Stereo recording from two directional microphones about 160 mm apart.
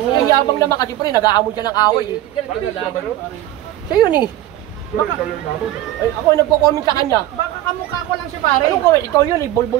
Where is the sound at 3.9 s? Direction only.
25° left (ahead or behind).